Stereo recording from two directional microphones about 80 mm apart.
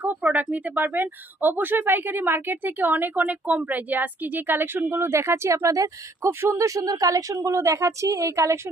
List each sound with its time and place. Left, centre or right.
0.0 s a woman's voice: right